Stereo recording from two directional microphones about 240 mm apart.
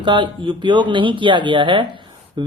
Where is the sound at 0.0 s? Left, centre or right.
Centre.